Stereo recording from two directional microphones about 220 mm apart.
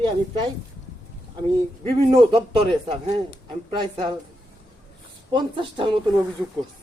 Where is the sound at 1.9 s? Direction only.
20° right (ahead or behind).